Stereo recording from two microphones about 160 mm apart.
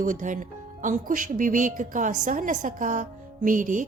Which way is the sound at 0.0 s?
55° right (ahead or behind).